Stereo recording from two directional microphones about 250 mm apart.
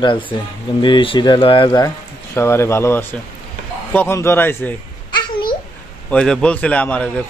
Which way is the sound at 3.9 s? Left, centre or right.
Centre.